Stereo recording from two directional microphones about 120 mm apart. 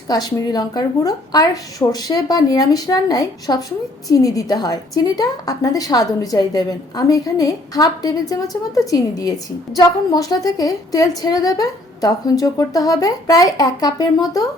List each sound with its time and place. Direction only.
0.1 s a woman's voice: 35° left (ahead or behind)